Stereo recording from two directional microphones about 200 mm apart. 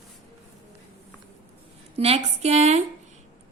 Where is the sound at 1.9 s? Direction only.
30° right (ahead or behind).